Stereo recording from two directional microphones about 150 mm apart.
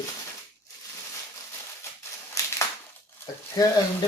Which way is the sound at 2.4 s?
20° left (ahead or behind).